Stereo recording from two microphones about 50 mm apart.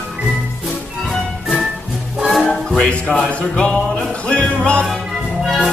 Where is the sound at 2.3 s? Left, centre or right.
Centre.